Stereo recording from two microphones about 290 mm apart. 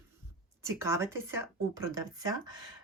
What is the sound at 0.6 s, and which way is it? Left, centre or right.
Speech, centre.